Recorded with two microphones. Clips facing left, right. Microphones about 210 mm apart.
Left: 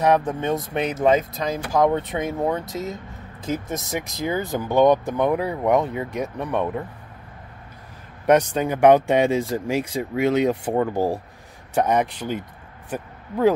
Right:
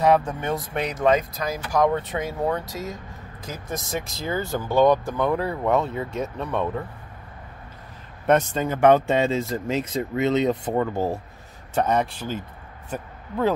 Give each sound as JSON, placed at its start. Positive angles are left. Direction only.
{"t": 0.0, "sound": "speech", "side_deg": 15}
{"t": 8.3, "sound": "speech", "side_deg": 15}